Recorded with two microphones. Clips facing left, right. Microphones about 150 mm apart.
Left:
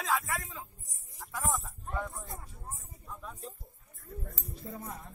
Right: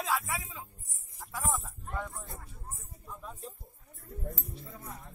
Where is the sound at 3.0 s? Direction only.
5° right (ahead or behind).